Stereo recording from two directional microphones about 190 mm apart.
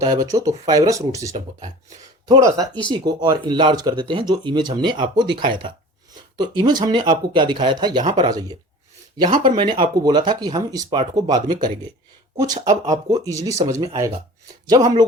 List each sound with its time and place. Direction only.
0.0 s speech: 20° right (ahead or behind)
9.6 s speech: 25° right (ahead or behind)